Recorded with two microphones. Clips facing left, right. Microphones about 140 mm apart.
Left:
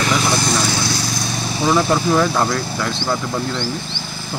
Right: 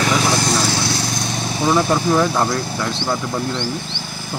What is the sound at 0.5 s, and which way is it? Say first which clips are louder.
Lawn mower: even; 35° right (ahead or behind).